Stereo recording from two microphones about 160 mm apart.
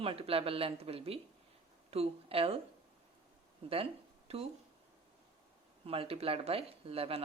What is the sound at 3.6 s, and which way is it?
Speech, 35° right (ahead or behind).